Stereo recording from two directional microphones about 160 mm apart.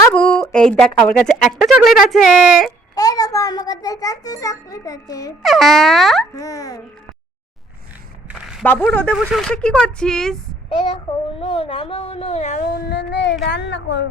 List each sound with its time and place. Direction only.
0.1 s speech: 5° left (ahead or behind)
2.9 s a child's voice: 25° left (ahead or behind)
5.4 s speech: centre (ahead or behind)
6.3 s a child's voice: 20° left (ahead or behind)
8.4 s speech: 5° right (ahead or behind)
8.6 s speech: 10° left (ahead or behind)
10.7 s a child's voice: 30° left (ahead or behind)
12.6 s speech: 85° left